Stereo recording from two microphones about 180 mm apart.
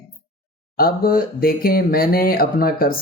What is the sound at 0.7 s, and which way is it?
Speech, 55° left (ahead or behind).